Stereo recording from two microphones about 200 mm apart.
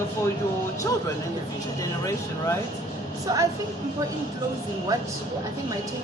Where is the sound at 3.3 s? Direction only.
20° right (ahead or behind).